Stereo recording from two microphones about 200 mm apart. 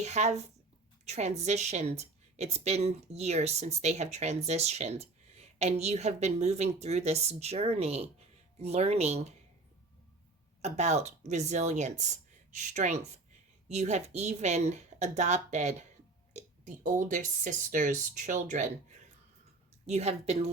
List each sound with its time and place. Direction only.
0.0 s a woman's voice: 35° right (ahead or behind)
10.6 s a woman's voice: 35° right (ahead or behind)
19.9 s a woman's voice: 30° right (ahead or behind)